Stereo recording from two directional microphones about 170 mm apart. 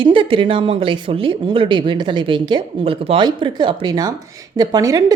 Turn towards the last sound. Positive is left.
turn(degrees=-20)  # may be behind; listen again after turning